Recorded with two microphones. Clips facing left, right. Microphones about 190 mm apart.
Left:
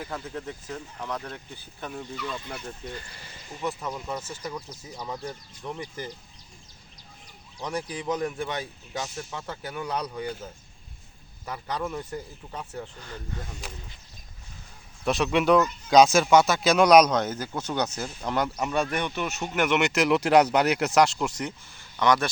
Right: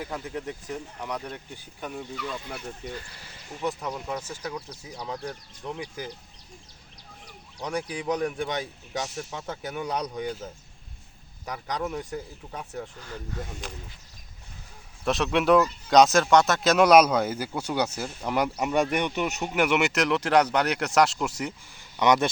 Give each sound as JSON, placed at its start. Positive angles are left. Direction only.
{"t": 0.0, "sound": "speech", "side_deg": -5}
{"t": 4.1, "sound": "speech", "side_deg": -10}
{"t": 4.9, "sound": "speech", "side_deg": 0}
{"t": 7.8, "sound": "speech", "side_deg": -10}
{"t": 11.4, "sound": "speech", "side_deg": -10}
{"t": 15.0, "sound": "speech", "side_deg": 0}
{"t": 20.1, "sound": "speech", "side_deg": 10}